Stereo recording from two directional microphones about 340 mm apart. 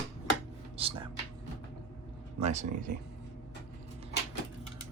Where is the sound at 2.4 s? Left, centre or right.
Centre.